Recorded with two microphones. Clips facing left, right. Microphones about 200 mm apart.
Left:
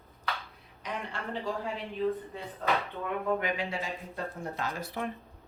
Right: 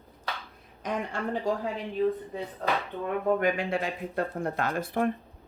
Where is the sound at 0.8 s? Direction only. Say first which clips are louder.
Right 6 dB; 45° right (ahead or behind).